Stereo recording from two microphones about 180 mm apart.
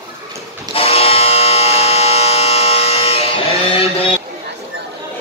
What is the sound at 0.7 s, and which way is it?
Electric shaver, 35° left (ahead or behind).